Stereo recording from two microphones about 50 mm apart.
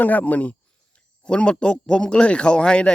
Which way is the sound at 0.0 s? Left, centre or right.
Left.